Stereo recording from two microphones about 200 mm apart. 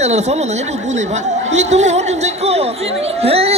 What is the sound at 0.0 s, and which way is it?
Speech, 35° right (ahead or behind).